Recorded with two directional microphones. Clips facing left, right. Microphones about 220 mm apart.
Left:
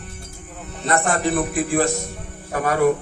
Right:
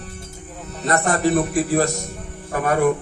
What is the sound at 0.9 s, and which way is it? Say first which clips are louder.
A man's voice: right 2 dB; 40° right (ahead or behind).